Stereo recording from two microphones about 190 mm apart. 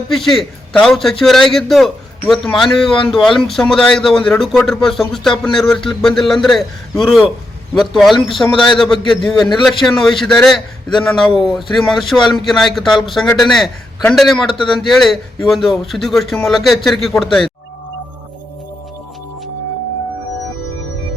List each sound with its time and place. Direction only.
0.1 s speech: centre (ahead or behind)
9.3 s a man's voice: 20° left (ahead or behind)
9.8 s speech: centre (ahead or behind)